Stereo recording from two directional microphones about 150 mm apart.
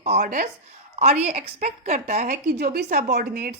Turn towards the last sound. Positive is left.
turn(degrees=-80)